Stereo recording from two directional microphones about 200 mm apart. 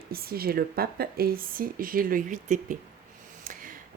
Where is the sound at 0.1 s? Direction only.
50° right (ahead or behind).